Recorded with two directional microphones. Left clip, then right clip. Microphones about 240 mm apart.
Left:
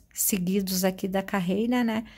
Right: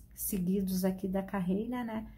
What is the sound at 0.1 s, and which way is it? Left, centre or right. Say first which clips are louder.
A woman's voice: left 8 dB; left.